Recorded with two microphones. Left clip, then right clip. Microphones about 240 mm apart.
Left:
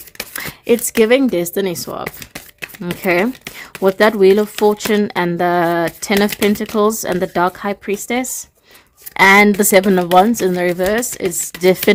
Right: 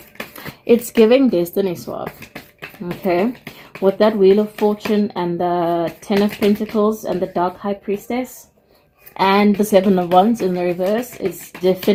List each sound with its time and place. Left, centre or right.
0.7 s a woman's voice: left
1.7 s a woman's voice: left